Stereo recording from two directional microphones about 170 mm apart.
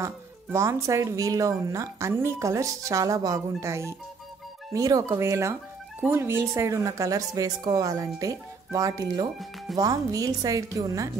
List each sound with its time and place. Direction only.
0.0 s speech: 15° right (ahead or behind)